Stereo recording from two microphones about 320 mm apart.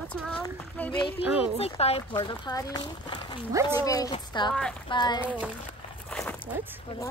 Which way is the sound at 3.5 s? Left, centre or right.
Centre.